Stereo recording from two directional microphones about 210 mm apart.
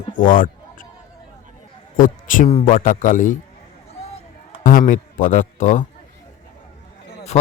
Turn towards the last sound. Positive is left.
turn(degrees=30)  # may be behind; listen again after turning